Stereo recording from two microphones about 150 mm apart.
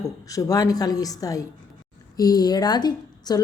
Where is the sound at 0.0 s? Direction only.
20° left (ahead or behind).